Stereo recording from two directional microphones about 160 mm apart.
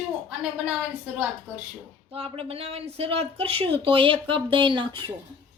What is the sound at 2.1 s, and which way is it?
Speech, 35° right (ahead or behind).